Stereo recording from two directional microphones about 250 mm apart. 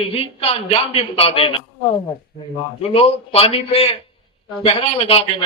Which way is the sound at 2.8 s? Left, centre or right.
Left.